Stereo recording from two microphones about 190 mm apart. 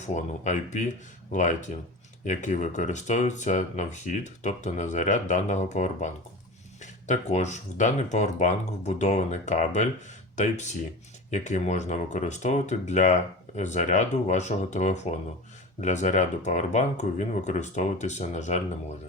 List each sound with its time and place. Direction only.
0.0 s speech: 40° left (ahead or behind)